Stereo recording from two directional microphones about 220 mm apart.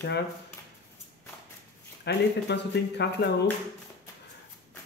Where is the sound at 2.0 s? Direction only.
50° left (ahead or behind).